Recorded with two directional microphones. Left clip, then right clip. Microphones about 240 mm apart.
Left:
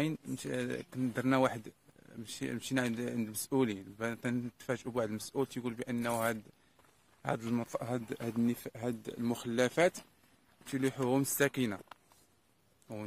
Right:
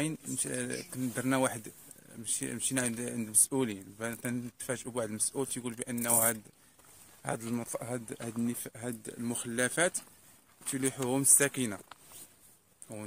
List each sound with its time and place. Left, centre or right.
0.0 s speech: centre